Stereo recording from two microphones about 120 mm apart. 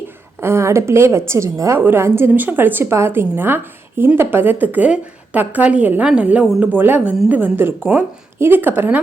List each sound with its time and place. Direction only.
0.3 s a woman's voice: 20° right (ahead or behind)